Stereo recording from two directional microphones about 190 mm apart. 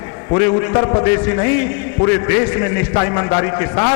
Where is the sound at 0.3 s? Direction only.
15° left (ahead or behind).